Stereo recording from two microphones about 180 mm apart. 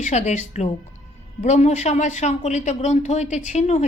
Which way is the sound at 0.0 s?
40° left (ahead or behind).